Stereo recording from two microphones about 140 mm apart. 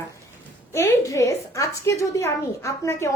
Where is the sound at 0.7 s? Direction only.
20° left (ahead or behind).